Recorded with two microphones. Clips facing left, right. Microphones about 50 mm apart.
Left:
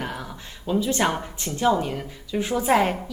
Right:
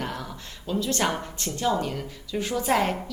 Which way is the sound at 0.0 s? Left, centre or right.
Centre.